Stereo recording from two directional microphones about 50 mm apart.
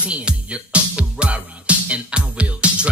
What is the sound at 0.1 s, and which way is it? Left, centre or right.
Music, right.